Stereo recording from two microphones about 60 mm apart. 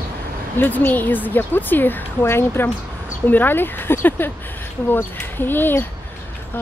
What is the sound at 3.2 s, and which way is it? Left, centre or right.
Speech, left.